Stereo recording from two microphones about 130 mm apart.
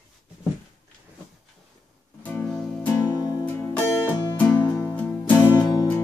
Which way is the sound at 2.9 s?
20° left (ahead or behind).